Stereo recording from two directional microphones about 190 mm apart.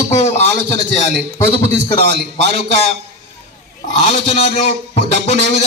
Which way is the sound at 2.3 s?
65° right (ahead or behind).